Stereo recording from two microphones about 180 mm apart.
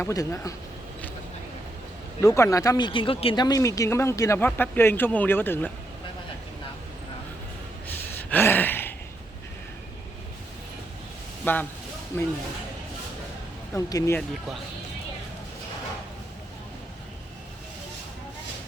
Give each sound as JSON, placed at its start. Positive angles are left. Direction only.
{"t": 0.0, "sound": "speech", "side_deg": 15}
{"t": 2.2, "sound": "speech", "side_deg": 15}
{"t": 7.9, "sound": "gasp", "side_deg": 10}
{"t": 11.5, "sound": "speech", "side_deg": 10}
{"t": 13.7, "sound": "speech", "side_deg": 15}